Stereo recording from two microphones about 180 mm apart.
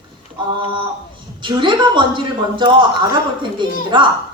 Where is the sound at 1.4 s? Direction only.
25° right (ahead or behind).